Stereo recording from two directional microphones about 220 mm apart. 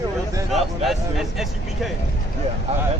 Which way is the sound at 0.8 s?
Centre (ahead or behind).